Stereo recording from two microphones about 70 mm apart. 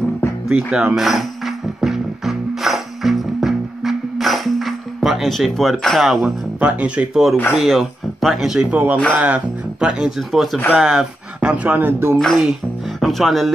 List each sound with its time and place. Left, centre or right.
0.5 s music: centre
6.2 s speech: right
7.5 s speech: centre
8.6 s speech: right
9.8 s speech: centre; by 12.2 s right
12.2 s speech: centre